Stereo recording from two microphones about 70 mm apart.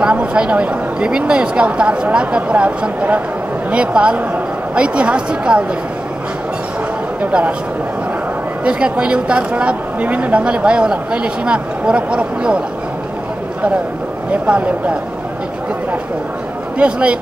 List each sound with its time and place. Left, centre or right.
0.0 s a woman's voice: centre
7.2 s speech: right
8.6 s a woman's voice: centre
14.3 s a sound: centre
16.7 s a woman's voice: centre